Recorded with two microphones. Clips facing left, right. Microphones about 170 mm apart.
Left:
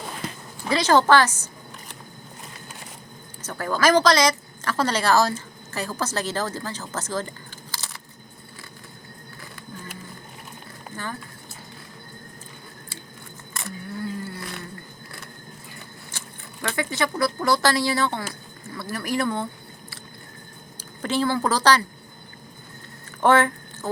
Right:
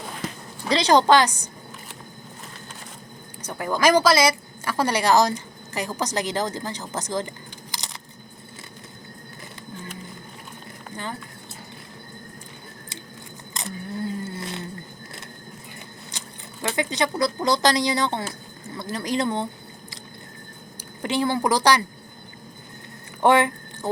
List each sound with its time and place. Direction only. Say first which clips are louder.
0.9 s speech: right 1 dB; 15° right (ahead or behind)
3.4 s a woman's voice: right 1 dB; 15° right (ahead or behind)
13.5 s a sound: right 2 dB; 20° right (ahead or behind)
16.1 s speech: right 1 dB; 15° right (ahead or behind)
21.0 s speech: even; 15° right (ahead or behind)
23.2 s a sound: even; 15° right (ahead or behind)